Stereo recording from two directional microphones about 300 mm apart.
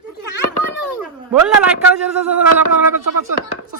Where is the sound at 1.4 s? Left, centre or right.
Centre.